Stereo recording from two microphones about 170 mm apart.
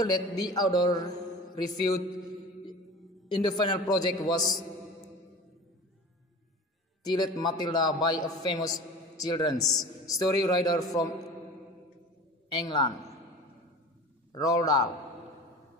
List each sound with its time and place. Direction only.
0.0 s a man's voice: 25° left (ahead or behind)
3.3 s a man's voice: 25° left (ahead or behind)
7.0 s a man's voice: 25° left (ahead or behind)
9.6 s speech: centre (ahead or behind)
10.1 s a man's voice: 20° left (ahead or behind)
12.4 s a man's voice: 25° left (ahead or behind)
14.3 s a man's voice: 20° left (ahead or behind)